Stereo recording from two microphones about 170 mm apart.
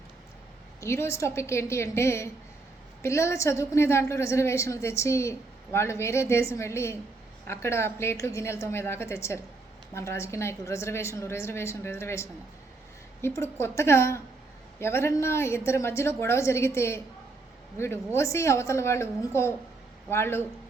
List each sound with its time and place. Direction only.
0.8 s a woman's voice: 15° left (ahead or behind)